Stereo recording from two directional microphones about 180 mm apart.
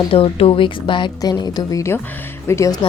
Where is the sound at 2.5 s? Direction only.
15° left (ahead or behind).